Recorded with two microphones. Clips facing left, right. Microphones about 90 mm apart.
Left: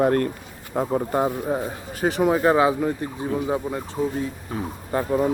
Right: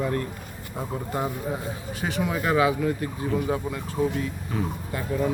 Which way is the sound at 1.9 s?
40° left (ahead or behind).